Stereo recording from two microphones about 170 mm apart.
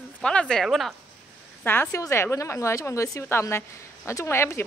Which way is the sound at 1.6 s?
10° left (ahead or behind).